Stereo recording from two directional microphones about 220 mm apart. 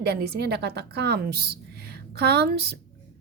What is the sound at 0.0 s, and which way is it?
A woman's voice, 45° right (ahead or behind).